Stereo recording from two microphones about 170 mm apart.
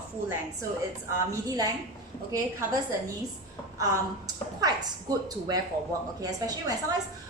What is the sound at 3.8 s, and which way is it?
A woman's voice, 20° right (ahead or behind).